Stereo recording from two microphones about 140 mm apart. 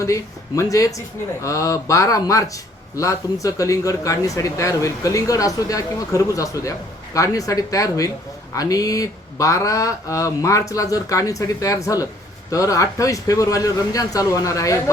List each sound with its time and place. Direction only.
0.0 s speech: 25° left (ahead or behind)